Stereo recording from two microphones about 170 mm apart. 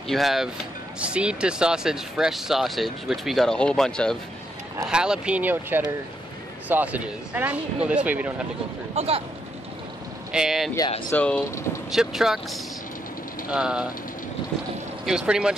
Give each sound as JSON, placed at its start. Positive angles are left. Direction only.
{"t": 0.1, "sound": "speech", "side_deg": 0}
{"t": 8.9, "sound": "speech", "side_deg": -35}
{"t": 10.3, "sound": "speech", "side_deg": -5}
{"t": 11.1, "sound": "speech", "side_deg": 10}
{"t": 11.9, "sound": "speech", "side_deg": 0}
{"t": 15.0, "sound": "speech", "side_deg": -5}